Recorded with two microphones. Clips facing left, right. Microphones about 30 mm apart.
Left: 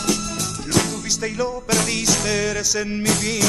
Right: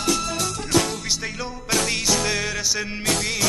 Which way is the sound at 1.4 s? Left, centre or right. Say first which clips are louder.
Left 5 dB; centre.